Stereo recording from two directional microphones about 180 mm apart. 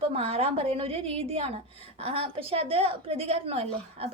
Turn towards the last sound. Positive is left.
turn(degrees=-35)  # may be behind; listen again after turning